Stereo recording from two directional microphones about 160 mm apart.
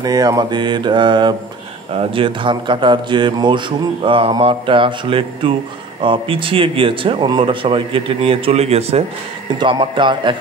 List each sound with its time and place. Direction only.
0.0 s mantra: 25° right (ahead or behind)
2.0 s speech: 30° right (ahead or behind)
9.6 s mantra: 30° right (ahead or behind)